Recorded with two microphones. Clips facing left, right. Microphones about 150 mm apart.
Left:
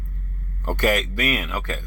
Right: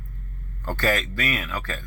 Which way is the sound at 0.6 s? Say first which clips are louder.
Left 3 dB; 15° left (ahead or behind).